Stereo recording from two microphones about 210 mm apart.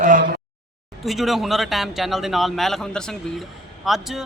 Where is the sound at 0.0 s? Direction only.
40° right (ahead or behind).